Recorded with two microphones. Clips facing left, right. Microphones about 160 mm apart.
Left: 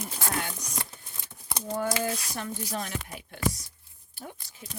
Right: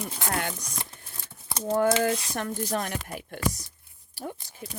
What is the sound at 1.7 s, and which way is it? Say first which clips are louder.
Speech: right 6 dB; 50° right (ahead or behind).